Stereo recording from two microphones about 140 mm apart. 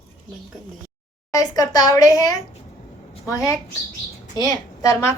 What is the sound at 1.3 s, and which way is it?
A woman's voice, 25° left (ahead or behind).